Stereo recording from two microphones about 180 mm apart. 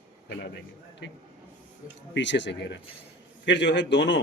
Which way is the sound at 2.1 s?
80° left.